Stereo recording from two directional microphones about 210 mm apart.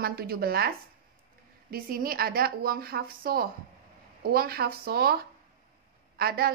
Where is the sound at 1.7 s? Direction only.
45° right (ahead or behind).